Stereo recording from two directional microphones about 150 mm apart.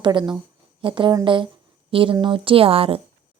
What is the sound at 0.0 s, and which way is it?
Speech, 30° right (ahead or behind).